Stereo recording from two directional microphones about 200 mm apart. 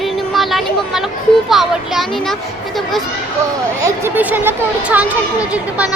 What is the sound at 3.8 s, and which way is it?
A child's voice, 10° right (ahead or behind).